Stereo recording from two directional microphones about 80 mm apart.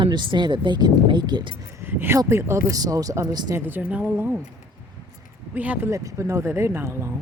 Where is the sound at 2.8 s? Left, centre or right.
Right.